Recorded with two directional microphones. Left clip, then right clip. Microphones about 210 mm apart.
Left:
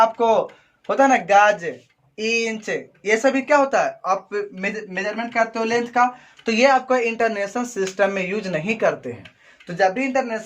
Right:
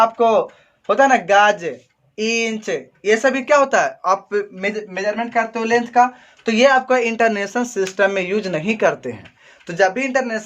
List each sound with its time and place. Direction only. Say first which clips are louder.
0.0 s speech: right 2 dB; 35° right (ahead or behind)